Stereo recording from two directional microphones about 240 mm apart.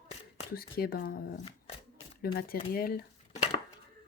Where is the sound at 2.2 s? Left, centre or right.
Left.